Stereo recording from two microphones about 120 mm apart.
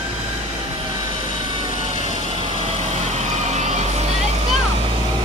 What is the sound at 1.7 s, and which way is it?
Vehicle, 65° right (ahead or behind).